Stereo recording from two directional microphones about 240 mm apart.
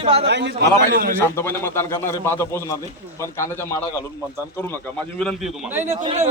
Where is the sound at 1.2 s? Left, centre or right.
Centre.